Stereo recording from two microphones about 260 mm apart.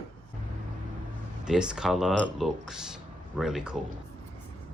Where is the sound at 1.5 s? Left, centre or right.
Centre.